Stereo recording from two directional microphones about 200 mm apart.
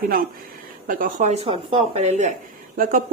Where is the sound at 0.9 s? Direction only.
45° right (ahead or behind).